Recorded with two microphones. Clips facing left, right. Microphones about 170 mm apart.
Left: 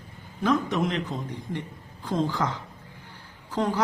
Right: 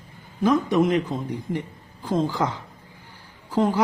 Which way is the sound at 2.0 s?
10° right (ahead or behind).